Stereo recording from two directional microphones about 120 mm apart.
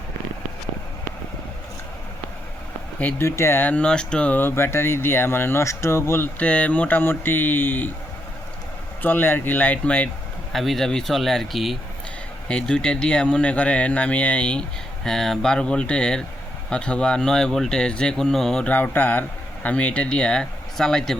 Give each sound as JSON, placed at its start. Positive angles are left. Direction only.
{"t": 3.0, "sound": "speech", "side_deg": 15}
{"t": 9.0, "sound": "speech", "side_deg": 15}
{"t": 10.5, "sound": "speech", "side_deg": 0}